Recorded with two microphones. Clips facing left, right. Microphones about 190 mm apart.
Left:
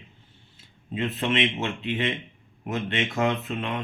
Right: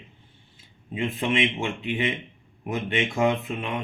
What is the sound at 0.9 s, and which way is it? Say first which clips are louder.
Speech: even; 10° right (ahead or behind).